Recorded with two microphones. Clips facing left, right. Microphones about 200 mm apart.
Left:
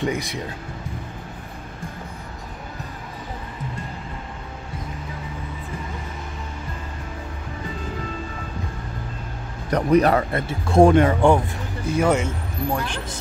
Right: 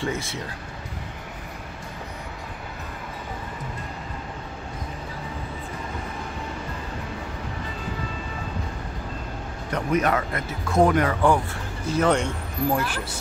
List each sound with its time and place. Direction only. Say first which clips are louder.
0.0 s speech: left 3 dB; 15° left (ahead or behind)
9.7 s speech: left 6 dB; 35° left (ahead or behind)
12.0 s speech: left 1 dB; 5° left (ahead or behind)
12.7 s speech: right 1 dB; 5° right (ahead or behind)